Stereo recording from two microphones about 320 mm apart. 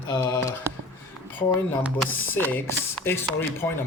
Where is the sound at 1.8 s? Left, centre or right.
Centre.